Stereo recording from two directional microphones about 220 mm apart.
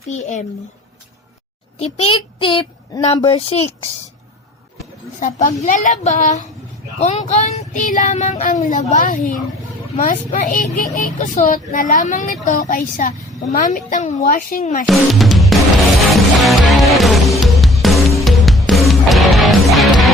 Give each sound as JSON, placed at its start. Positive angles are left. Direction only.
{"t": 0.0, "sound": "child singing", "side_deg": 30}
{"t": 1.8, "sound": "speech", "side_deg": 25}
{"t": 5.2, "sound": "child singing", "side_deg": 35}
{"t": 14.8, "sound": "music", "side_deg": 0}